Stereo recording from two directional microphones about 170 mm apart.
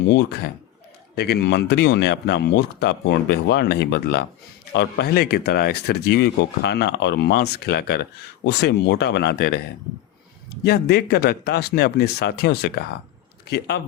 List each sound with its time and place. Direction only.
0.1 s speech: 75° left (ahead or behind)
8.4 s speech: 85° left; by 9.6 s 65° left (ahead or behind)
10.6 s speech: 70° left (ahead or behind)